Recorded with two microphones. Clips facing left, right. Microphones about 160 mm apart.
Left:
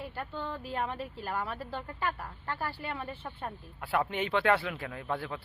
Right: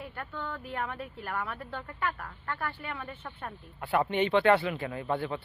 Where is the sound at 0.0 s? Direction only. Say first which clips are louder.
Left 1 dB; 30° left (ahead or behind).